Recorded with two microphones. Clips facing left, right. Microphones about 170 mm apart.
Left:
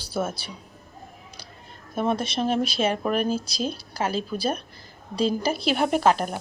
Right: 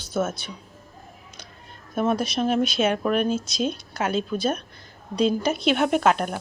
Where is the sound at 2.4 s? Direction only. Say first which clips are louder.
Right 2 dB; centre (ahead or behind).